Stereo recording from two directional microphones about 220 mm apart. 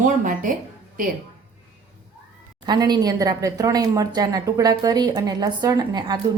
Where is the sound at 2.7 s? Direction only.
20° right (ahead or behind).